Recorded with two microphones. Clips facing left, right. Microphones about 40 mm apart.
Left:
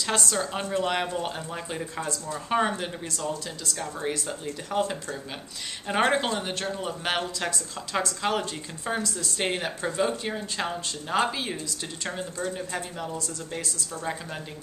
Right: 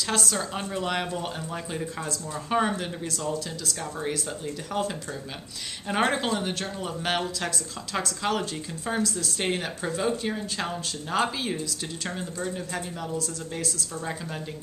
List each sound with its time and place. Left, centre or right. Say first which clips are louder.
0.0 s a woman's voice: left 1 dB; centre